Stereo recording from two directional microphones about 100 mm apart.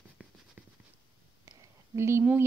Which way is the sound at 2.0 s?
25° right (ahead or behind).